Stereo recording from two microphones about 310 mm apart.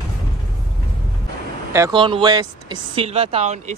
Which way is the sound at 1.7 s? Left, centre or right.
Centre.